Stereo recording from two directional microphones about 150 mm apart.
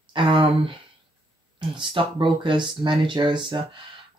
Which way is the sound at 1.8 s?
35° right (ahead or behind).